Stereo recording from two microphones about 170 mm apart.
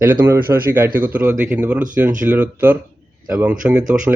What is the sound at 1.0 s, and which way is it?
Speech, 10° right (ahead or behind).